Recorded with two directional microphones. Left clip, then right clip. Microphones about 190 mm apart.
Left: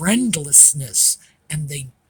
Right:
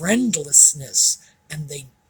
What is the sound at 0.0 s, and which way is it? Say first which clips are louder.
Speech: even; 50° left (ahead or behind).